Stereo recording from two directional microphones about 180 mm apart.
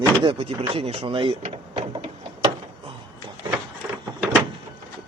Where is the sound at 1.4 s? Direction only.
35° right (ahead or behind).